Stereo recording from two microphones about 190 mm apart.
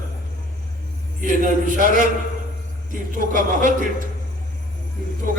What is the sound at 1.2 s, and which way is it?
Speech, 45° right (ahead or behind).